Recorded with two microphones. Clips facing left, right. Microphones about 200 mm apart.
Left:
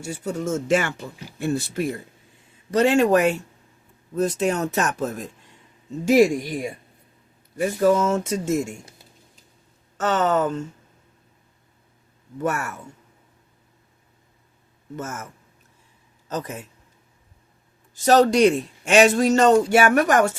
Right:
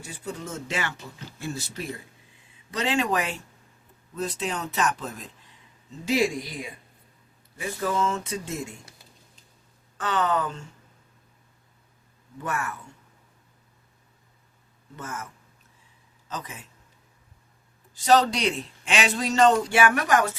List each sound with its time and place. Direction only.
0.1 s a man's voice: 45° left (ahead or behind)
10.0 s a man's voice: 45° left (ahead or behind)
12.4 s a man's voice: 45° left (ahead or behind)
14.9 s a man's voice: 45° left (ahead or behind)
16.3 s a man's voice: 40° left (ahead or behind)
17.9 s a man's voice: 45° left (ahead or behind)